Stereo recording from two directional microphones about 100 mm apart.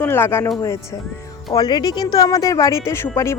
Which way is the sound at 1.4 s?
45° left (ahead or behind).